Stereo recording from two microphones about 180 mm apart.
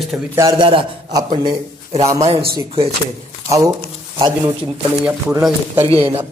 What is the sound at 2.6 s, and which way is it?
Speech, 30° right (ahead or behind).